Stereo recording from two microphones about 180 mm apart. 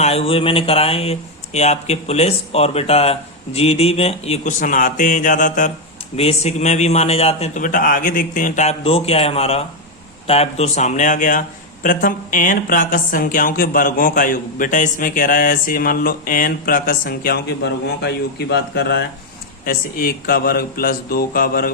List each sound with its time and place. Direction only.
0.0 s speech: 35° left (ahead or behind)
6.1 s speech: 35° left (ahead or behind); by 19.0 s 70° left (ahead or behind)
19.6 s speech: 55° left (ahead or behind)